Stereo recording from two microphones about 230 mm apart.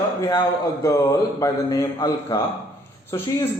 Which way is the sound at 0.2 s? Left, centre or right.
Centre.